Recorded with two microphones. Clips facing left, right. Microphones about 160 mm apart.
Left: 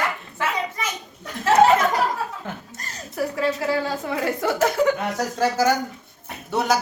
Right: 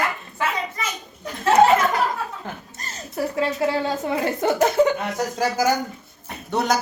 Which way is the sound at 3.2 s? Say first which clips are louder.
Right 1 dB; 25° right (ahead or behind).